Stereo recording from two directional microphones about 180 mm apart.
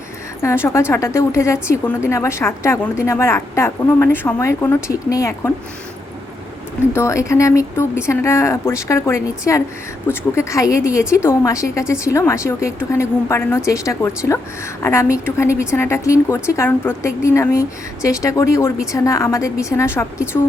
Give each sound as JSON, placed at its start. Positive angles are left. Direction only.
{"t": 0.4, "sound": "a woman's voice", "side_deg": 15}
{"t": 6.9, "sound": "a woman's voice", "side_deg": 15}